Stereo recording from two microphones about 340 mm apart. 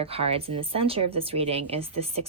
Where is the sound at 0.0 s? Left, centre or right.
Centre.